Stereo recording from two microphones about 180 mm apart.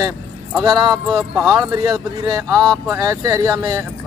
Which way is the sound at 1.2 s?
5° right (ahead or behind).